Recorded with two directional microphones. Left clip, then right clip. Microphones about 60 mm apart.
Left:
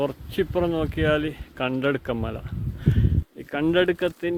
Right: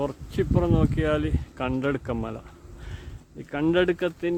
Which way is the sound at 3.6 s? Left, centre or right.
Centre.